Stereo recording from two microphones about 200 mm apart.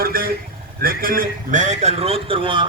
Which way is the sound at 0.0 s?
45° right (ahead or behind).